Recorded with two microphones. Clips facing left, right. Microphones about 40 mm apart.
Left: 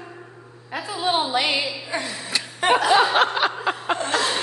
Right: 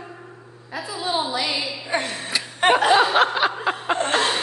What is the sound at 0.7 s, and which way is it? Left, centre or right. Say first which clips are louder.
Speech: left 2 dB; left.